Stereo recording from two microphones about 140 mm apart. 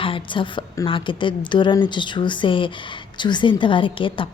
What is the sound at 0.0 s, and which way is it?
A woman's voice, 40° left (ahead or behind).